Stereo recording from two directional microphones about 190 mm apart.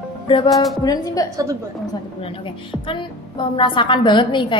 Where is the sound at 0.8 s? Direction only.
20° left (ahead or behind).